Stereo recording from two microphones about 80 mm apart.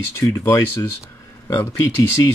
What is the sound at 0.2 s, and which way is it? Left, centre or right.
Speech, left.